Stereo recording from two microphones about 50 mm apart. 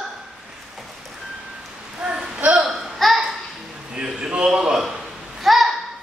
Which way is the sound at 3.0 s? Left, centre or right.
Centre.